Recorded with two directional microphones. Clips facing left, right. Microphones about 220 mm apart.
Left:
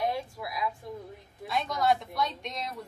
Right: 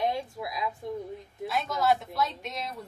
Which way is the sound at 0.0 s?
20° right (ahead or behind).